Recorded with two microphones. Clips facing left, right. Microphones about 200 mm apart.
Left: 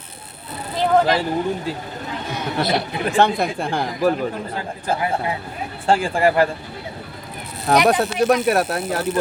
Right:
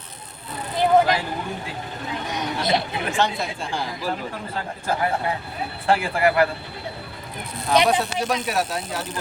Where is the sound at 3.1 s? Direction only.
55° left (ahead or behind).